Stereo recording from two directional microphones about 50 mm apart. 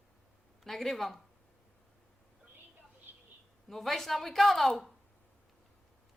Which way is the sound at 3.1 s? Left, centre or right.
Right.